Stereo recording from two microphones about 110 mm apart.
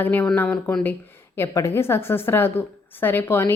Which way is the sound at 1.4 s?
25° left (ahead or behind).